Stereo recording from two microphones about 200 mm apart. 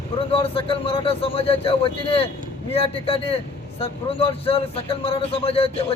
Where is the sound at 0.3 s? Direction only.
30° left (ahead or behind).